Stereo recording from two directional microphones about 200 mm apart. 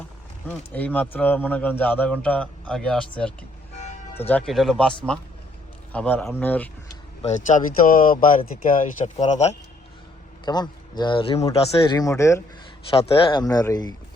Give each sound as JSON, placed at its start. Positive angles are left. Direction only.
{"t": 0.4, "sound": "speech", "side_deg": 10}
{"t": 7.2, "sound": "speech", "side_deg": 35}
{"t": 10.4, "sound": "speech", "side_deg": 20}
{"t": 12.9, "sound": "speech", "side_deg": 25}